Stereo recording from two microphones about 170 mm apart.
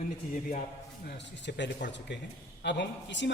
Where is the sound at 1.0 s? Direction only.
90° left.